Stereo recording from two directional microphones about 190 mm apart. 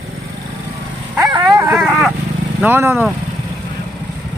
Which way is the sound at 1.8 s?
Centre (ahead or behind).